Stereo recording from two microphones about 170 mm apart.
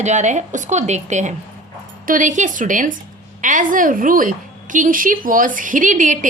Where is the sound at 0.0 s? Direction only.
45° right (ahead or behind).